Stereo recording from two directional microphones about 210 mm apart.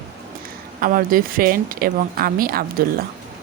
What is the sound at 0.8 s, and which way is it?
A woman's voice, 40° right (ahead or behind).